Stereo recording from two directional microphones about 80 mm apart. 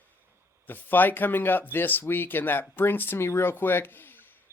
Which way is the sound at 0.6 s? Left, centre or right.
Left.